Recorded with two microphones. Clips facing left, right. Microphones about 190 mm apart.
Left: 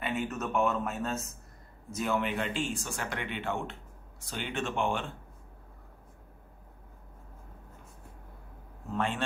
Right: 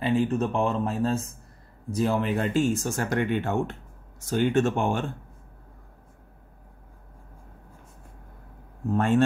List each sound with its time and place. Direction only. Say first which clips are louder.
0.0 s speech: right 9 dB; 30° right (ahead or behind)
8.9 s speech: right 9 dB; 45° right (ahead or behind)